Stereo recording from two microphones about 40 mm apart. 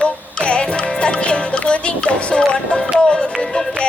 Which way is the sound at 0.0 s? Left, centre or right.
Left.